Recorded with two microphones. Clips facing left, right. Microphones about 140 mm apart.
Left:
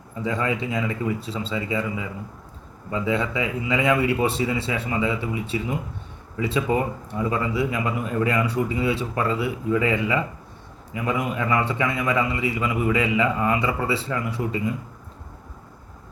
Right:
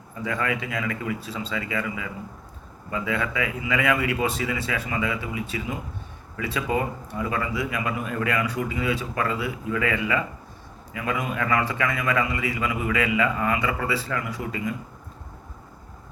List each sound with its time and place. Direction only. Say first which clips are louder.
0.3 s a man's voice: left 3 dB; 25° left (ahead or behind)